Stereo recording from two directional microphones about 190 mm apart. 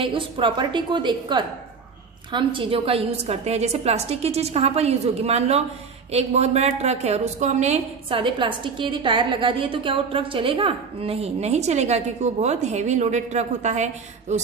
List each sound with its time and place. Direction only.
0.0 s a woman's voice: 25° right (ahead or behind)